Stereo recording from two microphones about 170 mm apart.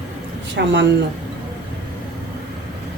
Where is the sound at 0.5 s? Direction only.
90° right.